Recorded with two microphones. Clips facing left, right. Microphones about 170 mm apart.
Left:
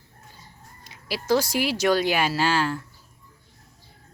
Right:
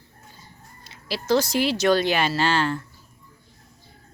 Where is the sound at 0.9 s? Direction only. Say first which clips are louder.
Even; 10° left (ahead or behind).